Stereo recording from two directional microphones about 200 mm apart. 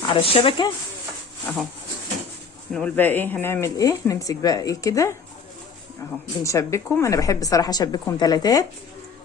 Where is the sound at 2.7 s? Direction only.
5° left (ahead or behind).